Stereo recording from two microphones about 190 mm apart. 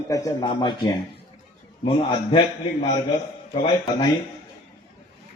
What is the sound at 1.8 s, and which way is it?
Speech, 25° left (ahead or behind).